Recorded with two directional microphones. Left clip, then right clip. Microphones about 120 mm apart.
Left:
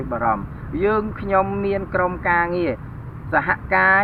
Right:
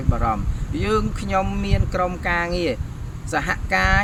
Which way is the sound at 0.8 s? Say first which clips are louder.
Left 2 dB; 30° right (ahead or behind).